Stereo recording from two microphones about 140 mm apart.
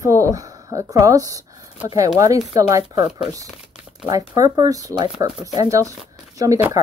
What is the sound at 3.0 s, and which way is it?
Speech, 50° left (ahead or behind).